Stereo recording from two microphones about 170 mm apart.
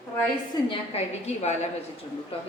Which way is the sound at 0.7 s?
40° left (ahead or behind).